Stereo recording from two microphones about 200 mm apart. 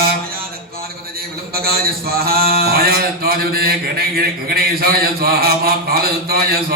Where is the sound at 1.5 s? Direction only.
50° right (ahead or behind).